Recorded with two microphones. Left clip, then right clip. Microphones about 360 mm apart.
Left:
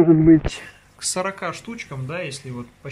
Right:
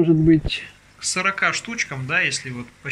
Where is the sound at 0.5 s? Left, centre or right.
Centre.